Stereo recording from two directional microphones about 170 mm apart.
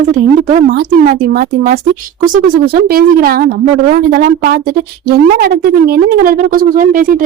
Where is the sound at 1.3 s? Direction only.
55° right (ahead or behind).